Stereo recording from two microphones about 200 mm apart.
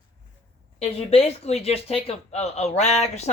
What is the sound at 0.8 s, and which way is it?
Speech, 30° left (ahead or behind).